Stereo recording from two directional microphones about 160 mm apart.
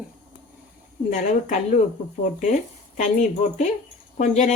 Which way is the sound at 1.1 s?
50° left (ahead or behind).